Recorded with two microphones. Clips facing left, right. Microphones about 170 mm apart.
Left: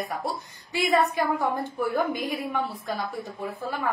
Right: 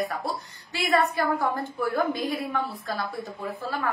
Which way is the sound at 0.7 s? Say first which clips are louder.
Left 1 dB; 15° left (ahead or behind).